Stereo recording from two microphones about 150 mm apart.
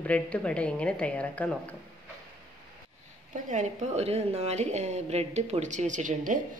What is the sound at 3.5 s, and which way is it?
A woman's voice, 55° right (ahead or behind).